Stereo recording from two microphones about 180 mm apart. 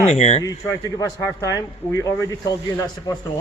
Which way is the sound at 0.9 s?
20° left (ahead or behind).